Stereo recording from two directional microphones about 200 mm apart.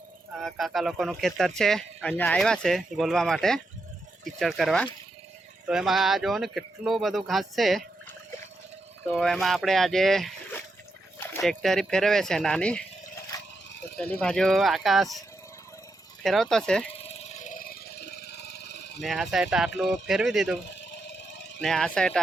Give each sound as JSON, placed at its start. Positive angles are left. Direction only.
{"t": 0.3, "sound": "speech", "side_deg": 0}
{"t": 9.0, "sound": "speech", "side_deg": 0}
{"t": 14.2, "sound": "speech", "side_deg": 5}
{"t": 16.2, "sound": "speech", "side_deg": 0}
{"t": 16.9, "sound": "vehicle", "side_deg": 30}
{"t": 19.0, "sound": "speech", "side_deg": 0}
{"t": 20.8, "sound": "a sound", "side_deg": 65}
{"t": 21.6, "sound": "speech", "side_deg": 5}